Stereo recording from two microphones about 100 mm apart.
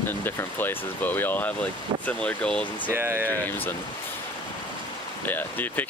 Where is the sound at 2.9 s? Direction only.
20° right (ahead or behind).